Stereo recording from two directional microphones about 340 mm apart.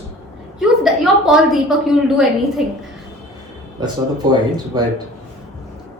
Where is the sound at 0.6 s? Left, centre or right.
Centre.